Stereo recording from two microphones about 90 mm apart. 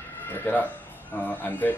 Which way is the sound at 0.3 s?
20° left (ahead or behind).